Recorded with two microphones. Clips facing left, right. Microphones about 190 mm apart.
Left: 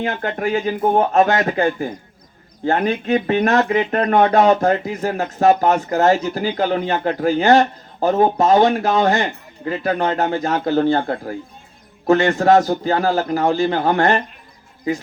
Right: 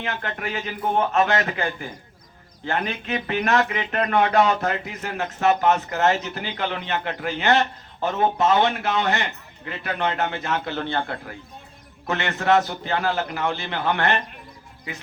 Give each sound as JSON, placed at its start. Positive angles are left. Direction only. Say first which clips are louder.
{"t": 0.0, "sound": "speech", "louder": "left 8 dB", "side_deg": 35}